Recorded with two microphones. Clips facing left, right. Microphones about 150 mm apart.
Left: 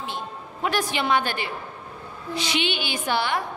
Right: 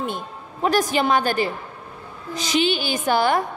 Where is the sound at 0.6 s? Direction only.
40° right (ahead or behind).